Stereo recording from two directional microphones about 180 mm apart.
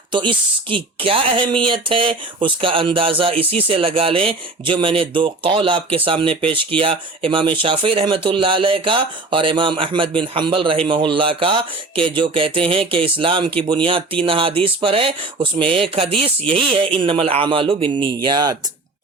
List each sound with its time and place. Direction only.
0.1 s speech: 25° right (ahead or behind)